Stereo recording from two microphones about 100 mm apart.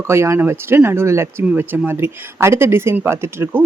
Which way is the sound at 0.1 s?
30° right (ahead or behind).